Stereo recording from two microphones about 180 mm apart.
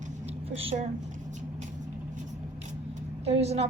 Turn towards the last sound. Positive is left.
turn(degrees=-35)  # may be behind; listen again after turning